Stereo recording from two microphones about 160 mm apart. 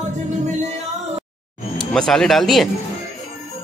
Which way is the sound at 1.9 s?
5° left (ahead or behind).